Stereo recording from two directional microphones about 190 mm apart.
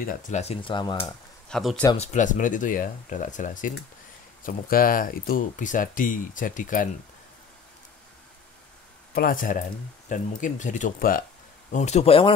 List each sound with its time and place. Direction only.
0.0 s speech: 45° left (ahead or behind); by 0.9 s 25° left (ahead or behind)
1.5 s speech: centre (ahead or behind)
2.0 s speech: 40° left (ahead or behind)
9.1 s speech: 50° left (ahead or behind)
11.7 s speech: 35° left (ahead or behind)